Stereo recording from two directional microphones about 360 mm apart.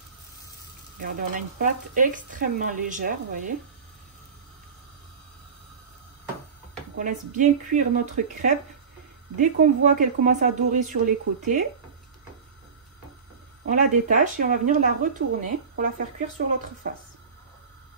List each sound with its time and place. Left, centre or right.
0.9 s speech: right
7.0 s speech: right
13.7 s speech: right